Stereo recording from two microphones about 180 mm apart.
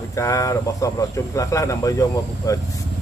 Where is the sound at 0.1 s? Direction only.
15° left (ahead or behind).